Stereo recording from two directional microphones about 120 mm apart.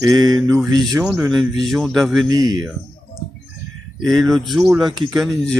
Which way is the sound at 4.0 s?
Centre (ahead or behind).